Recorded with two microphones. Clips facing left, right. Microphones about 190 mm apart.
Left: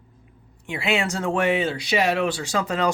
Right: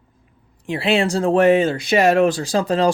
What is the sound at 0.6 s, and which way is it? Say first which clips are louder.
Speech: right 6 dB; 35° right (ahead or behind).